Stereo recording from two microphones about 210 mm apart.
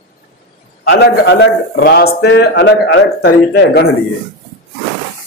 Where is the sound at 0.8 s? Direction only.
60° left (ahead or behind).